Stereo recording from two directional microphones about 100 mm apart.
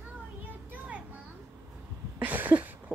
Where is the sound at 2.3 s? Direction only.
15° right (ahead or behind).